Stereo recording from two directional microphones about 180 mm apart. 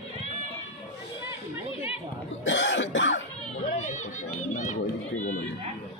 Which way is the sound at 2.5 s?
90° left.